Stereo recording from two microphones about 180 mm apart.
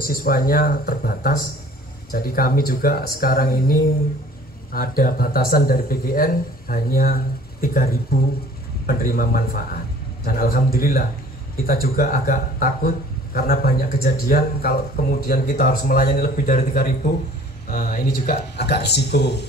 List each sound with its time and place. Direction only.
0.0 s speech: 55° left (ahead or behind)